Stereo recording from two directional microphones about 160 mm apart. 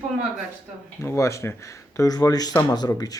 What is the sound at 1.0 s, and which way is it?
Speech, 15° left (ahead or behind).